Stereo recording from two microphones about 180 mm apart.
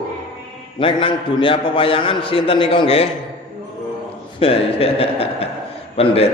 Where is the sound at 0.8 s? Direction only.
30° left (ahead or behind).